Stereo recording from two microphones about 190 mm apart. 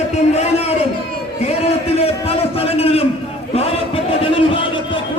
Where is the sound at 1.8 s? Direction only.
30° left (ahead or behind).